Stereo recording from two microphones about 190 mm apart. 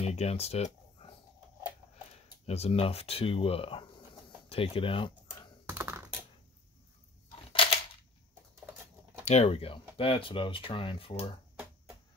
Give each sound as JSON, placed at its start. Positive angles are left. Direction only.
{"t": 0.0, "sound": "speech", "side_deg": 35}
{"t": 2.4, "sound": "speech", "side_deg": 35}
{"t": 5.7, "sound": "computer keyboard", "side_deg": -15}
{"t": 9.2, "sound": "speech", "side_deg": 35}